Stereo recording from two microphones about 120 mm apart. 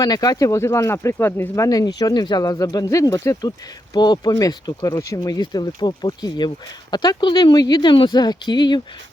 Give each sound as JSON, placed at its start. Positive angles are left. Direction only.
{"t": 0.0, "sound": "speech", "side_deg": 35}